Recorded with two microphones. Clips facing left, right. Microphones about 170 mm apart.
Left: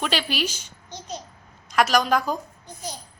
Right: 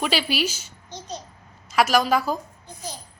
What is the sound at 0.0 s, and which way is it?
Speech, 10° right (ahead or behind).